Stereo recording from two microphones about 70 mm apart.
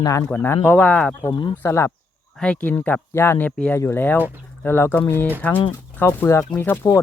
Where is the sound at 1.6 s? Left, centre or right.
Left.